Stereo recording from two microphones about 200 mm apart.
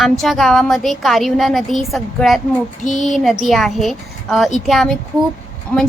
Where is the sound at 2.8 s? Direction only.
40° left (ahead or behind).